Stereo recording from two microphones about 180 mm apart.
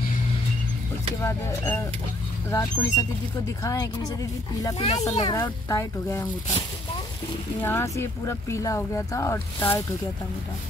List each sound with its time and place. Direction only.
1.2 s speech: 15° left (ahead or behind)
7.6 s speech: 15° left (ahead or behind)